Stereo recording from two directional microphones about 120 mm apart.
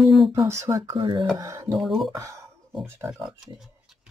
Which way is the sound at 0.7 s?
45° right (ahead or behind).